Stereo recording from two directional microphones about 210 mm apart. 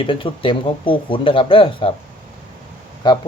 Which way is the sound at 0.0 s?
25° left (ahead or behind).